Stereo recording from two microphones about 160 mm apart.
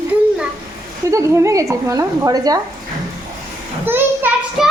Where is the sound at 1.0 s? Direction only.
20° right (ahead or behind).